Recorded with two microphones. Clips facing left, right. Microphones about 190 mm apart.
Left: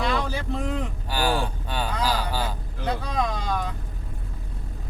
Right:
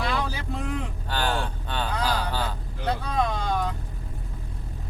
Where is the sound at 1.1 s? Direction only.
10° left (ahead or behind).